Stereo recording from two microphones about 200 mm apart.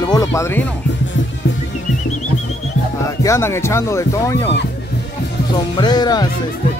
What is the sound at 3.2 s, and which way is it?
Speech, 15° left (ahead or behind).